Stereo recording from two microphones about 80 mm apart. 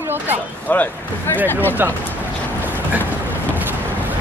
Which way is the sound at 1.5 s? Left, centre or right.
Left.